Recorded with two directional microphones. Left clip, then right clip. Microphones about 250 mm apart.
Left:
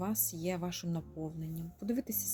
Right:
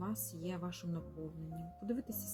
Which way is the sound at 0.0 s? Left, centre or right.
Left.